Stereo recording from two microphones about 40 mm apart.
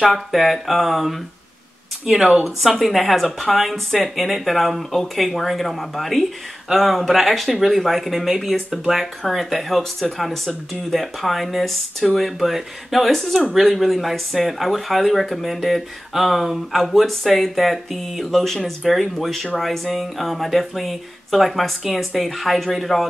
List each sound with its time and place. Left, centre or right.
0.0 s speech: centre
2.1 s speech: centre
2.4 s speech: centre